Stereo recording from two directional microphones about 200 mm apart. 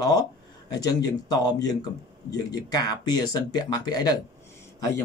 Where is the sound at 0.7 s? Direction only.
20° left (ahead or behind).